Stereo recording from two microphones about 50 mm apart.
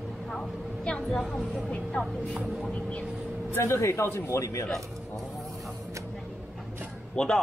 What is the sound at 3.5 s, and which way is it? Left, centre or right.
Speech, left.